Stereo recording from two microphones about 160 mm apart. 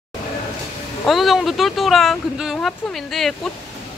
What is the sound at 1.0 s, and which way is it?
Speech, centre (ahead or behind).